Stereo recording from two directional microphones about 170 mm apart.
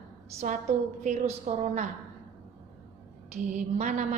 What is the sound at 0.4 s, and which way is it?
A woman's voice, 40° right (ahead or behind).